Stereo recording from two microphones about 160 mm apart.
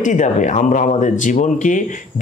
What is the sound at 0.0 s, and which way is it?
Speech, 50° left (ahead or behind).